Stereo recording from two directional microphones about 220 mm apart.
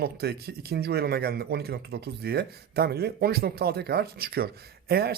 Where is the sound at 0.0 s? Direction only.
45° right (ahead or behind).